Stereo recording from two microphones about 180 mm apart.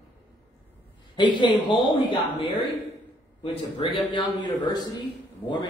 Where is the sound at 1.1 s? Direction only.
25° left (ahead or behind).